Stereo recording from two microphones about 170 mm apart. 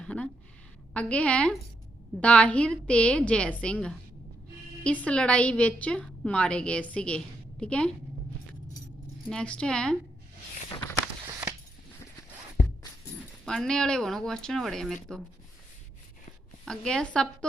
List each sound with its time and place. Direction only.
0.0 s a sound: 5° left (ahead or behind)
0.9 s a woman's voice: 5° left (ahead or behind)
9.3 s speech: 5° left (ahead or behind)
11.3 s a sound: 15° right (ahead or behind)
13.4 s speech: 5° left (ahead or behind)
16.6 s speech: 5° left (ahead or behind)